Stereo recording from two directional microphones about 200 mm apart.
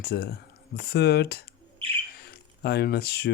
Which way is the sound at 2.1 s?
55° left (ahead or behind).